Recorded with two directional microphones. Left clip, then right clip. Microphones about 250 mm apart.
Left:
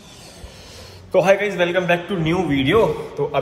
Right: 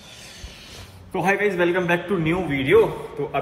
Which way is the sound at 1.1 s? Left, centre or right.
Centre.